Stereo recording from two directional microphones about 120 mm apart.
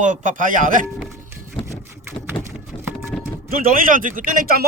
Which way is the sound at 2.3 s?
10° left (ahead or behind).